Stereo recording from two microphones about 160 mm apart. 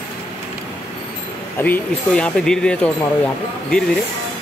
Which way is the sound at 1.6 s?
10° left (ahead or behind).